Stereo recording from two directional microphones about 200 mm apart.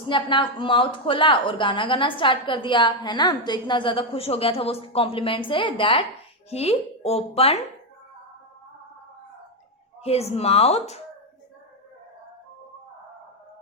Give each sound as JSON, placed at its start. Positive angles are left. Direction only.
{"t": 0.1, "sound": "a woman's voice", "side_deg": 25}
{"t": 10.0, "sound": "speech", "side_deg": 30}